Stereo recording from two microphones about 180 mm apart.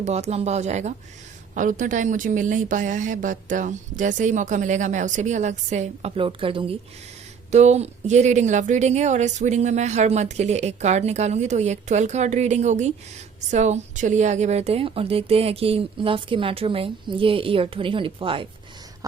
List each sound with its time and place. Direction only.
0.0 s a woman's voice: 40° right (ahead or behind)